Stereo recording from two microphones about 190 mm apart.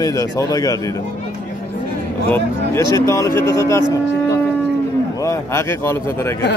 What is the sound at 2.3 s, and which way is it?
Speech, 15° left (ahead or behind).